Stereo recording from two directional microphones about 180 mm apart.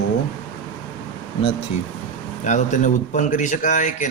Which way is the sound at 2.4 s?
45° left (ahead or behind).